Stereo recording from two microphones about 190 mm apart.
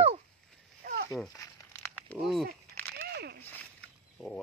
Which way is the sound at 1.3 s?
15° left (ahead or behind).